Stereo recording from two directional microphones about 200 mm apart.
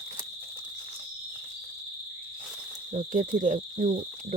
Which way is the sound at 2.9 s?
40° right (ahead or behind).